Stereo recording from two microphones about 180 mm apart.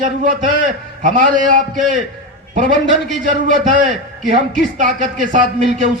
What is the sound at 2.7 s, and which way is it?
Speech, 80° left.